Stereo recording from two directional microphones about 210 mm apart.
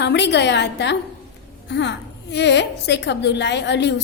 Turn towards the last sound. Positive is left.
turn(degrees=55)  # may be behind; listen again after turning